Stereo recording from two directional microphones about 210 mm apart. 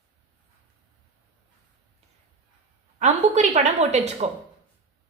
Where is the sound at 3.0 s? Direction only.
30° right (ahead or behind).